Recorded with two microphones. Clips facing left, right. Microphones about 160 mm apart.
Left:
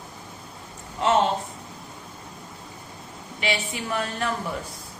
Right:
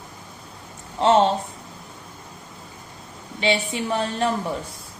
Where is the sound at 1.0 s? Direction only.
30° right (ahead or behind).